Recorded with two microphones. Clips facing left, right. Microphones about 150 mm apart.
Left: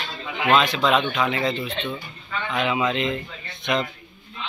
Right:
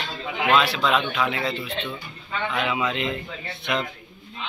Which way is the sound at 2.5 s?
Centre (ahead or behind).